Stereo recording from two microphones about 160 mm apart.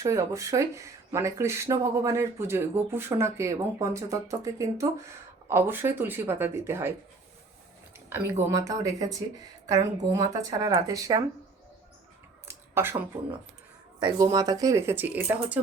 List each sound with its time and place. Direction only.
0.0 s speech: 20° right (ahead or behind)
8.1 s speech: 15° right (ahead or behind)
12.5 s a sound: 15° right (ahead or behind)
14.3 s speech: 25° right (ahead or behind)